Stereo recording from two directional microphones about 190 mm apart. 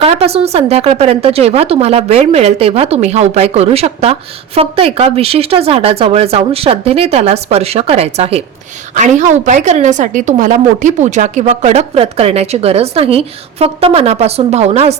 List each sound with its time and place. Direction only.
0.0 s a woman's voice: 30° right (ahead or behind)